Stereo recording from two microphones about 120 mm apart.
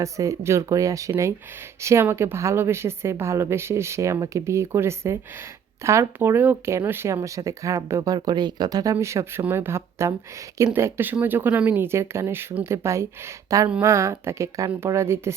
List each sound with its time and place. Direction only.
0.0 s speech: 25° right (ahead or behind)